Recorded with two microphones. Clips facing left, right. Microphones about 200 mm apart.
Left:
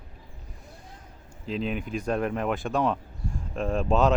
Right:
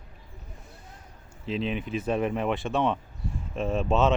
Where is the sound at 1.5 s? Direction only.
40° left (ahead or behind).